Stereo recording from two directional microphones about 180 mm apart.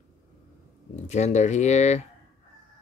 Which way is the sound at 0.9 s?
40° left (ahead or behind).